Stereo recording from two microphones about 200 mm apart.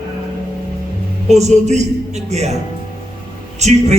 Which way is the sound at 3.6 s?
35° right (ahead or behind).